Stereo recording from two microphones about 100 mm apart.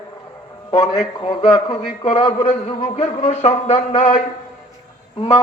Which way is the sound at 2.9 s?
90° left.